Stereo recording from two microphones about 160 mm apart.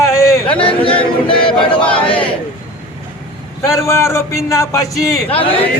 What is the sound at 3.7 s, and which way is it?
A man's voice, 15° left (ahead or behind).